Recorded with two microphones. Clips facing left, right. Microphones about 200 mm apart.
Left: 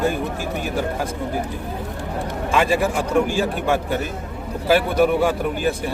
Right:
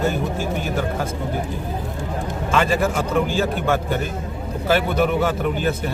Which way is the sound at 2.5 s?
10° left (ahead or behind).